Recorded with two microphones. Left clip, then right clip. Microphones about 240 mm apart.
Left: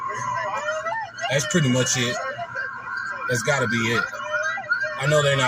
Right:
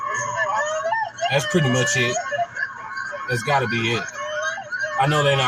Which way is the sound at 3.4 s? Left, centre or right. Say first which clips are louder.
Right 3 dB; centre.